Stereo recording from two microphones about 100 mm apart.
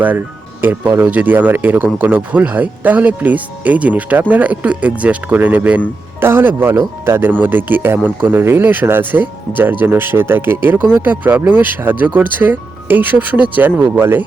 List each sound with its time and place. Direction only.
0.6 s speech: 20° right (ahead or behind)